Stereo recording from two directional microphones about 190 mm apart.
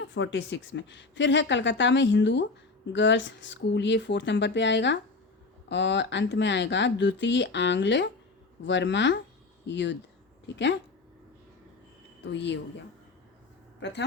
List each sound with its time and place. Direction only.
0.0 s speech: 70° left (ahead or behind)
12.2 s speech: 70° left (ahead or behind)